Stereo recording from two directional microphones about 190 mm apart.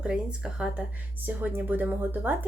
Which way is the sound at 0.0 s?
5° right (ahead or behind).